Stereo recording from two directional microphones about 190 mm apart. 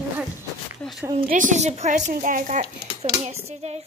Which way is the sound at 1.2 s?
45° right (ahead or behind).